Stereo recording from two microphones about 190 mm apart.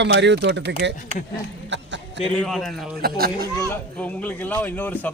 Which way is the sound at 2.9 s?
55° right (ahead or behind).